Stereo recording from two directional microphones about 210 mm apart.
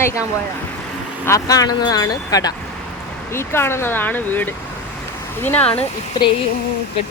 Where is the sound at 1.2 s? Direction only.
15° left (ahead or behind).